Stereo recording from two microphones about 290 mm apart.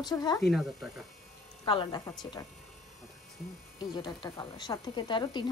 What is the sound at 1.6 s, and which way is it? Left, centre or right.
Speech, centre.